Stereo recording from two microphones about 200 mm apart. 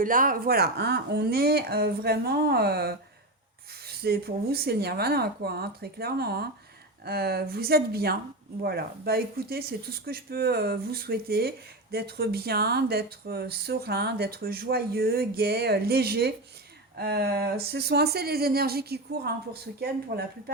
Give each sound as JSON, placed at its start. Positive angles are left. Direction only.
{"t": 0.0, "sound": "speech", "side_deg": -45}